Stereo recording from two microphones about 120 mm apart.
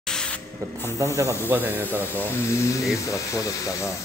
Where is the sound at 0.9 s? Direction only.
25° right (ahead or behind).